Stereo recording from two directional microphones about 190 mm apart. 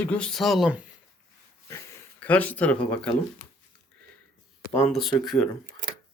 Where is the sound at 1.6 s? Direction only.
10° left (ahead or behind).